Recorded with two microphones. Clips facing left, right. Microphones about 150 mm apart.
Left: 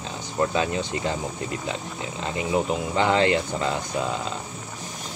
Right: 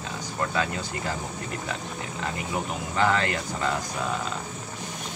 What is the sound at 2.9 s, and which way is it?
Speech, 25° left (ahead or behind).